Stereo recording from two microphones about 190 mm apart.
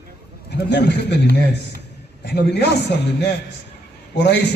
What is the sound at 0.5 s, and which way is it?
A man's voice, 60° left (ahead or behind).